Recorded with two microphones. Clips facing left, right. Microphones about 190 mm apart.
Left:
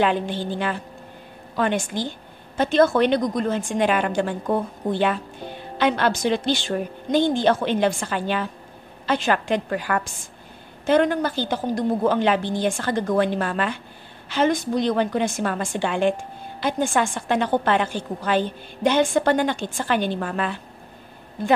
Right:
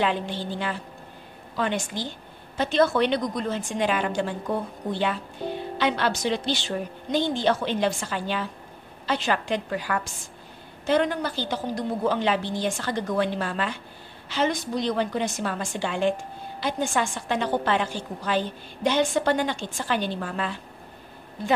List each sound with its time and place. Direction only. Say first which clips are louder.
0.0 s a woman's voice: left 4 dB; 55° left (ahead or behind)